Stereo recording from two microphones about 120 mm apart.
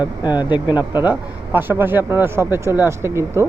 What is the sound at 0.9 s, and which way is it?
Speech, 20° right (ahead or behind).